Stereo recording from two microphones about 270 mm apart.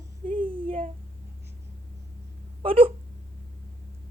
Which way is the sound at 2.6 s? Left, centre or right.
Right.